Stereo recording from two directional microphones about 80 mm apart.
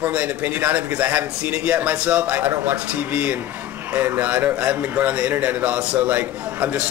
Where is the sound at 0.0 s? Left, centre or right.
Centre.